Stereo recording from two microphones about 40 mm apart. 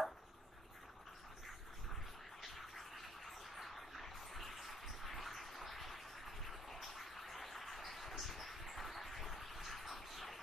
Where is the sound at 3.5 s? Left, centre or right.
Centre.